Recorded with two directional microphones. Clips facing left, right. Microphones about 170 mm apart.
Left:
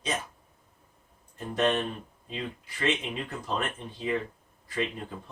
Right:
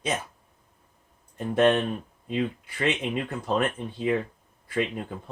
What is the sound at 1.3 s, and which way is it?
Speech, 60° right (ahead or behind).